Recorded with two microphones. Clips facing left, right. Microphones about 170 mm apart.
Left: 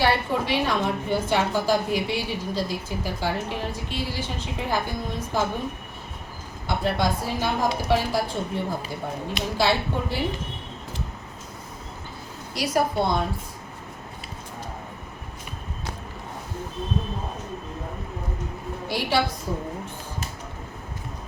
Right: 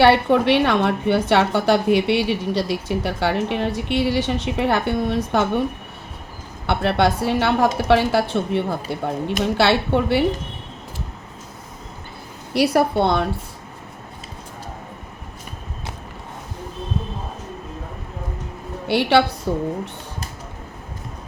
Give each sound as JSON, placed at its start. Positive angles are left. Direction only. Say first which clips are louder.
{"t": 0.0, "sound": "a woman's voice", "louder": "right 9 dB", "side_deg": -70}
{"t": 6.7, "sound": "a woman's voice", "louder": "right 6 dB", "side_deg": -70}
{"t": 12.5, "sound": "a woman's voice", "louder": "right 6 dB", "side_deg": -65}
{"t": 18.9, "sound": "a woman's voice", "louder": "right 8 dB", "side_deg": -70}